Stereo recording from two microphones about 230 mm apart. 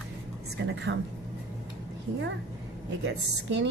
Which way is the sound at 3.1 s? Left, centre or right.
Right.